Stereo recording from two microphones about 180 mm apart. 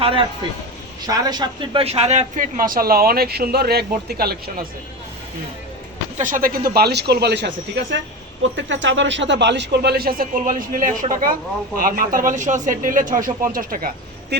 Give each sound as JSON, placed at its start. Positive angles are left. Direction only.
{"t": 0.0, "sound": "a man's voice", "side_deg": -30}
{"t": 6.1, "sound": "speech", "side_deg": -50}
{"t": 8.5, "sound": "a man's voice", "side_deg": -90}